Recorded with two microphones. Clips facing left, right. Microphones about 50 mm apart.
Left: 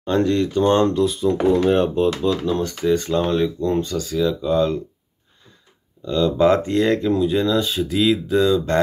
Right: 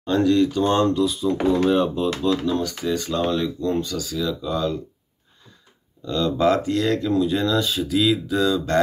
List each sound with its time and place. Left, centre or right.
0.0 s speech: left
6.0 s speech: left